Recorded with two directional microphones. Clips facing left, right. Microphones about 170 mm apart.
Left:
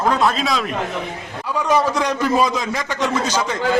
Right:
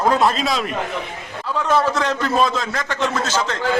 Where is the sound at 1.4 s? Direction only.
10° left (ahead or behind).